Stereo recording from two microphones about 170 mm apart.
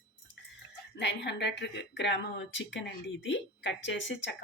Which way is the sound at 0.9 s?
90° left.